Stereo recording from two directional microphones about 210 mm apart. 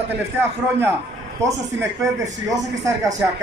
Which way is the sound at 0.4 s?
10° right (ahead or behind).